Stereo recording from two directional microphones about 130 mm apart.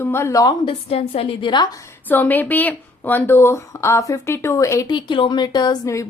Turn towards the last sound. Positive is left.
turn(degrees=30)  # may be behind; listen again after turning